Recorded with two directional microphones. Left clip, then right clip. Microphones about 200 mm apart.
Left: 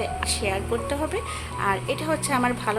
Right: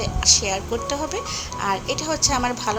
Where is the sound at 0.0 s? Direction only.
15° right (ahead or behind).